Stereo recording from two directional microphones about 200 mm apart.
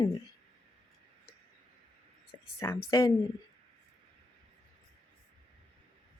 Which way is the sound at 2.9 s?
20° left (ahead or behind).